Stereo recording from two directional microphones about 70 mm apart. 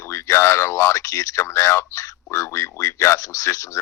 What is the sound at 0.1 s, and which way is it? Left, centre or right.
Speech, left.